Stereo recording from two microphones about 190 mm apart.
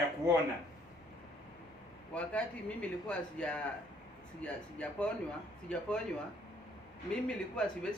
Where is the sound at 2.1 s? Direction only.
5° left (ahead or behind).